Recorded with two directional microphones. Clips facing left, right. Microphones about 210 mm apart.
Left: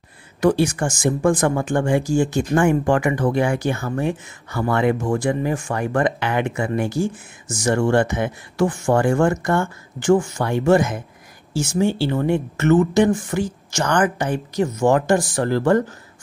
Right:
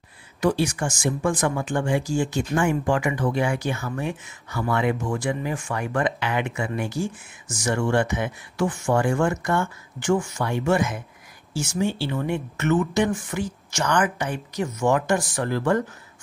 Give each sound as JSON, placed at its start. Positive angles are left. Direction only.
{"t": 0.4, "sound": "speech", "side_deg": 55}